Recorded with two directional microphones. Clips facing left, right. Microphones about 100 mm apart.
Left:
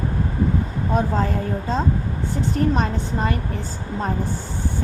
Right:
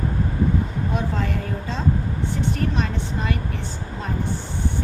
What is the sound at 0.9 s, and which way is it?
A woman's voice, 35° left (ahead or behind).